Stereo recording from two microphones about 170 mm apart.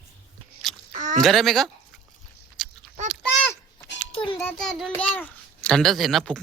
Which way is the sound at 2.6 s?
5° left (ahead or behind).